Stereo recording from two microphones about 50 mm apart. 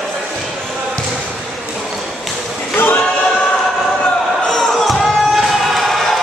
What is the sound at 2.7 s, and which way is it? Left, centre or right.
Choir, left.